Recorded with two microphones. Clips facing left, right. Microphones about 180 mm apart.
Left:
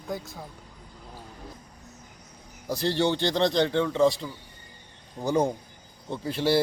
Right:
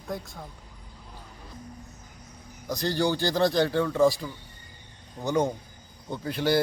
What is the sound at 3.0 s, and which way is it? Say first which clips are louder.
Speech: even; 25° left (ahead or behind).